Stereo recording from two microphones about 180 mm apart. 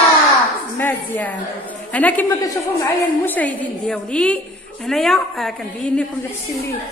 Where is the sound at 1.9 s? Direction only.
10° left (ahead or behind).